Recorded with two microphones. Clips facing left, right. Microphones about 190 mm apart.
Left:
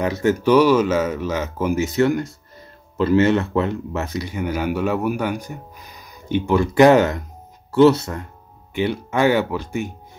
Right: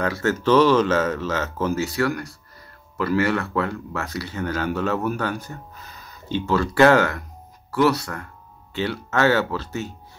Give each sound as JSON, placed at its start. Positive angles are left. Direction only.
{"t": 0.0, "sound": "speech", "side_deg": 15}